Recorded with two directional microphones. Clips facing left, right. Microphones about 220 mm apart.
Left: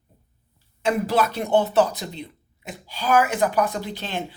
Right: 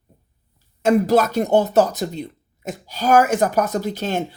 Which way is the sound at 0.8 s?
45° right (ahead or behind).